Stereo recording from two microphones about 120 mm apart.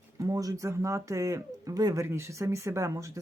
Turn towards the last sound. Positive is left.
turn(degrees=-25)  # may be behind; listen again after turning